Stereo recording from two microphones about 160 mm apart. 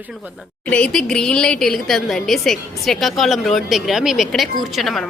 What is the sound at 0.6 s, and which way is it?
A woman's voice, 5° left (ahead or behind).